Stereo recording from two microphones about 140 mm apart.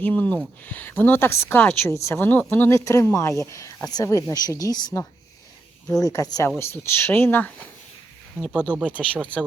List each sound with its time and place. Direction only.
0.0 s a woman's voice: 10° left (ahead or behind); by 4.9 s 25° left (ahead or behind)
6.0 s a woman's voice: 25° left (ahead or behind)
8.4 s speech: 5° right (ahead or behind)